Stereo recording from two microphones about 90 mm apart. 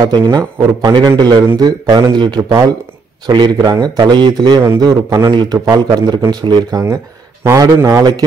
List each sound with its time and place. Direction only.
0.0 s speech: 45° right (ahead or behind)
3.3 s speech: 55° right (ahead or behind)
7.4 s a man's voice: 40° right (ahead or behind)